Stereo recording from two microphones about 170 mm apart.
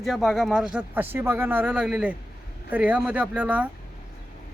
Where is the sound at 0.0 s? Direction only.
Centre (ahead or behind).